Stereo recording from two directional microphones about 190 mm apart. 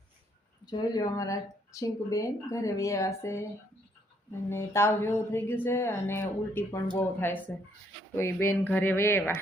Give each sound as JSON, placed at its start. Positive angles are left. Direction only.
{"t": 0.6, "sound": "speech", "side_deg": 20}
{"t": 4.4, "sound": "speech", "side_deg": 15}